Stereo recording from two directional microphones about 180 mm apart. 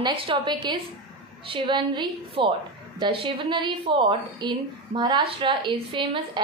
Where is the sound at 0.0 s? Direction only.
30° right (ahead or behind).